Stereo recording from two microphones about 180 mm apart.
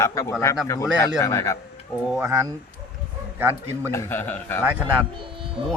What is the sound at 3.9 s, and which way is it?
Speech, 10° left (ahead or behind).